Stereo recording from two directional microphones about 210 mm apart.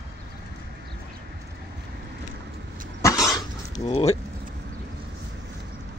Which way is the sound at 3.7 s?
30° left (ahead or behind).